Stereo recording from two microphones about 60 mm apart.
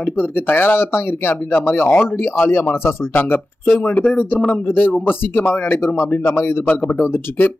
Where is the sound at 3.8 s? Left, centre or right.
Left.